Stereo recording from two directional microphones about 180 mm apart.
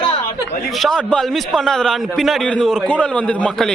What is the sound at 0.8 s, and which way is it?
A man's voice, 5° left (ahead or behind).